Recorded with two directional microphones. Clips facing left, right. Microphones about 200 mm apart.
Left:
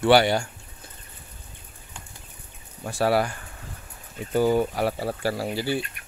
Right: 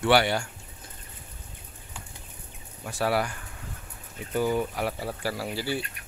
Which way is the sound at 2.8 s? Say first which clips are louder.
Left 4 dB; 35° left (ahead or behind).